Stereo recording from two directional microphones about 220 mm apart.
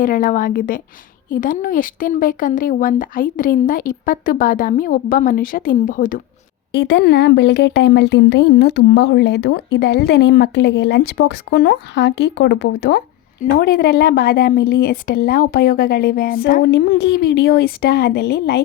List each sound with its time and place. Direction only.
0.0 s speech: 40° left (ahead or behind)
6.7 s speech: 50° left (ahead or behind)